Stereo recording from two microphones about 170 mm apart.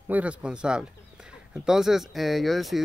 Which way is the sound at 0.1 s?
5° right (ahead or behind).